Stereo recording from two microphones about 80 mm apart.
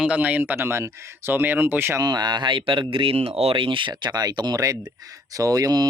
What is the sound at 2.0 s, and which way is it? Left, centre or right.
Speech, right.